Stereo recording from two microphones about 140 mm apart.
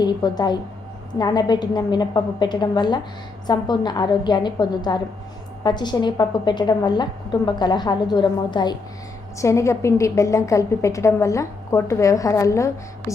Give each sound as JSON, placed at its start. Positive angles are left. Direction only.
{"t": 0.0, "sound": "a woman's voice", "side_deg": 30}
{"t": 9.4, "sound": "a woman's voice", "side_deg": 20}